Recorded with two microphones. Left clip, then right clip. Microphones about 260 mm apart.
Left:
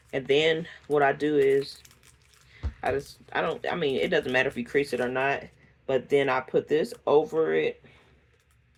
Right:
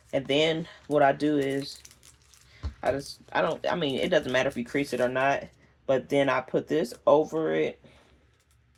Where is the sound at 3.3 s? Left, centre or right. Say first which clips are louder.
Right 2 dB; right.